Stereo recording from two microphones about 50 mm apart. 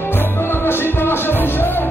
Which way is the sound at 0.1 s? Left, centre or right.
Left.